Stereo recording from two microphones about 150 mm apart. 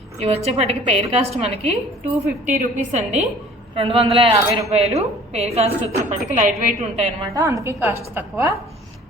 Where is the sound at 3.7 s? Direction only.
35° right (ahead or behind).